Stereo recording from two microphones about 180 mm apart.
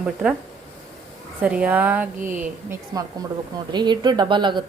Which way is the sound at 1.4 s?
5° right (ahead or behind).